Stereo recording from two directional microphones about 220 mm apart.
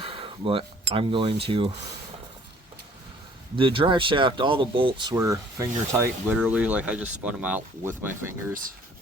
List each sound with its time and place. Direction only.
0.0 s a sound: 25° right (ahead or behind)
0.9 s speech: 25° right (ahead or behind)
3.5 s speech: 25° right (ahead or behind)